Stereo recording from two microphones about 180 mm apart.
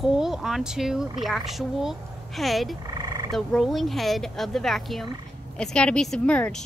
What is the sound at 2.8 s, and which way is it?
Frog, 20° right (ahead or behind).